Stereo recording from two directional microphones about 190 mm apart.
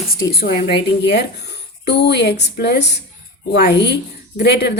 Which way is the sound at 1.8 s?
60° left (ahead or behind).